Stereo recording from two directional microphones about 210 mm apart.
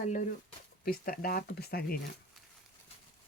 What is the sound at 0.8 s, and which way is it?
Speech, 45° left (ahead or behind).